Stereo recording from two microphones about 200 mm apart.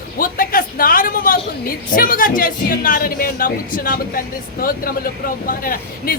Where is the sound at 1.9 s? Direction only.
45° left (ahead or behind).